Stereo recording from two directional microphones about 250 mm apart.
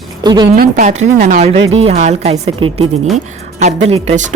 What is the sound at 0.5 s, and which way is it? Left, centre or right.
Speech, right.